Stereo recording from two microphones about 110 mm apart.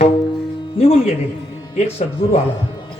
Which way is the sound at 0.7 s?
60° left (ahead or behind).